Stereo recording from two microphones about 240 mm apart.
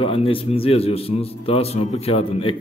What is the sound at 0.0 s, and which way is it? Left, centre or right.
A man's voice, left.